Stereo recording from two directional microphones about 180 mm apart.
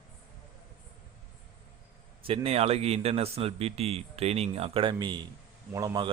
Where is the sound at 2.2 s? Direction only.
30° right (ahead or behind).